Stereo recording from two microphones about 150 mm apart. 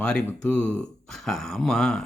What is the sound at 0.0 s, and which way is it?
Speech, 5° left (ahead or behind).